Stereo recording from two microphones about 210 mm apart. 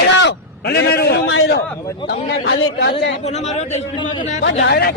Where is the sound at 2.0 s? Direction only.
50° left (ahead or behind).